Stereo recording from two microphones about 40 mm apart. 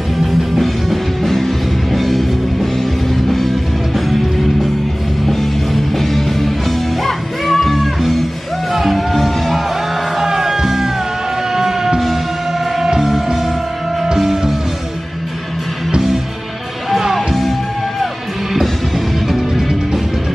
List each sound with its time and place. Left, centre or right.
0.2 s music: centre
6.0 s music: centre
10.1 s music: centre
15.9 s music: centre
19.2 s music: centre